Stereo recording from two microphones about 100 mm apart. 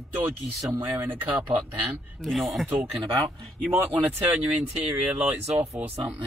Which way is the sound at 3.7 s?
15° right (ahead or behind).